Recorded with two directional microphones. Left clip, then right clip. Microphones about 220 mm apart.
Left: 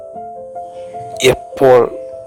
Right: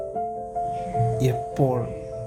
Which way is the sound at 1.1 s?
45° left (ahead or behind).